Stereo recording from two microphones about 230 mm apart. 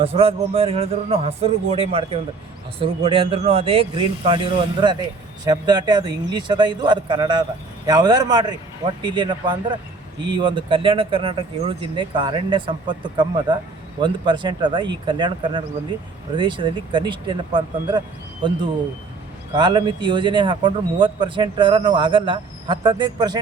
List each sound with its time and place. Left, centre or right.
0.0 s a man's voice: right
19.5 s speech: centre